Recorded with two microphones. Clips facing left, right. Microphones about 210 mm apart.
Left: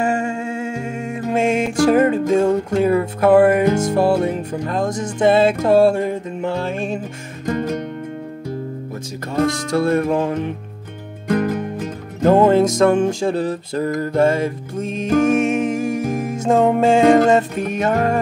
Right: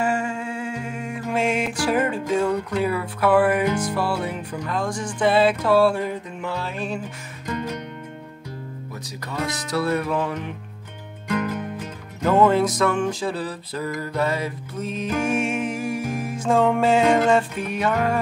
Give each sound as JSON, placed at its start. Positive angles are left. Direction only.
{"t": 0.7, "sound": "music", "side_deg": 25}
{"t": 1.7, "sound": "music", "side_deg": 45}
{"t": 7.4, "sound": "music", "side_deg": 45}
{"t": 9.3, "sound": "music", "side_deg": 45}